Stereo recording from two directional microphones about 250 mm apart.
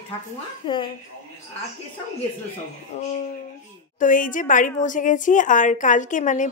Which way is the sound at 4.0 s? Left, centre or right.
Left.